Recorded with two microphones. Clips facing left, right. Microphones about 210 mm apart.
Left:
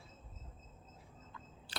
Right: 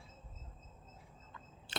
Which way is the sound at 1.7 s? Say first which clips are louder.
Right 4 dB; 25° right (ahead or behind).